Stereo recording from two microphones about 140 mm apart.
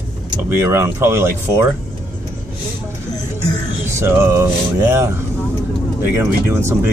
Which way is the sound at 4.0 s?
20° right (ahead or behind).